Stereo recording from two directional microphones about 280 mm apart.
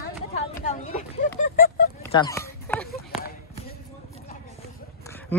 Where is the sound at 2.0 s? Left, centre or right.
Centre.